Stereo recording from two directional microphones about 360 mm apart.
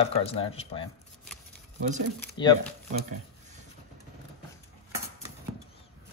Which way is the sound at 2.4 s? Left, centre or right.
Centre.